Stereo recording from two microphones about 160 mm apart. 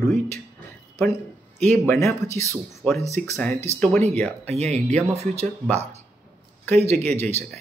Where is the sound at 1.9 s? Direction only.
20° left (ahead or behind).